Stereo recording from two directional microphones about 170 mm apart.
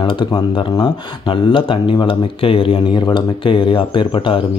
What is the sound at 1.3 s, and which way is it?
Speech, 30° left (ahead or behind).